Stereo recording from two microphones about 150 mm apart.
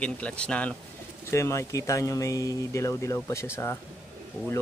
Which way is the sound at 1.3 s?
20° left (ahead or behind).